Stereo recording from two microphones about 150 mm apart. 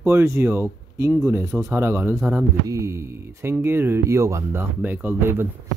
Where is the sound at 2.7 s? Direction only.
20° right (ahead or behind).